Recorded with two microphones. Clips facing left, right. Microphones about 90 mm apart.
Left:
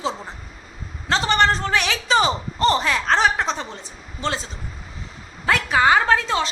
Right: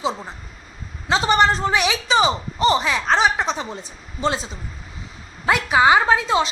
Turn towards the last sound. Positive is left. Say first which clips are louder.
# right 2 dB
turn(degrees=-15)  # may be behind; listen again after turning